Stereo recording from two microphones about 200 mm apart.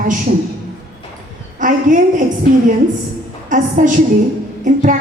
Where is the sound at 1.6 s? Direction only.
40° right (ahead or behind).